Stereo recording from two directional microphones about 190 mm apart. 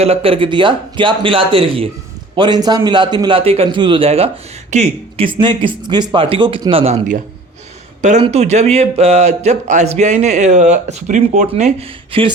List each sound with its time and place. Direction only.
0.0 s speech: 30° right (ahead or behind)